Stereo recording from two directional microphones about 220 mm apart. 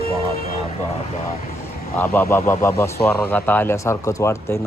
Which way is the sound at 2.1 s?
10° left (ahead or behind).